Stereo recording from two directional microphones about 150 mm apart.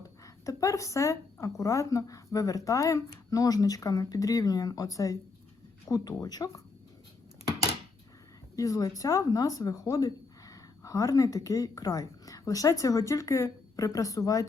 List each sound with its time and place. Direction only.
0.2 s speech: 20° left (ahead or behind)
8.5 s speech: 25° left (ahead or behind)